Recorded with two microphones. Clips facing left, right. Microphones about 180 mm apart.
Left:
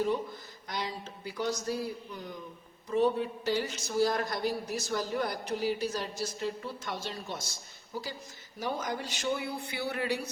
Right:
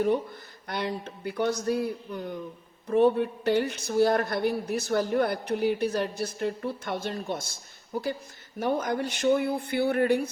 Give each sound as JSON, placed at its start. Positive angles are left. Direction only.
{"t": 0.7, "sound": "speech", "side_deg": -60}